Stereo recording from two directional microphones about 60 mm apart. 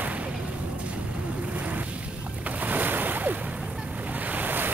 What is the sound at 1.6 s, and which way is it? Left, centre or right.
Boat, right.